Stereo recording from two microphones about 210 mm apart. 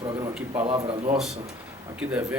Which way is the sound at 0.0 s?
20° right (ahead or behind).